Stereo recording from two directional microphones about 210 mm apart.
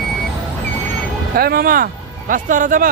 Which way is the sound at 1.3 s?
45° right (ahead or behind).